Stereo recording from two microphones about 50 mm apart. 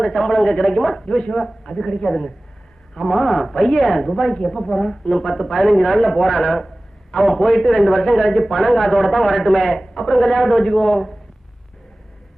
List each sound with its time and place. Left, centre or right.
0.0 s a man's voice: centre
1.0 s a man's voice: centre
1.4 s a man's voice: centre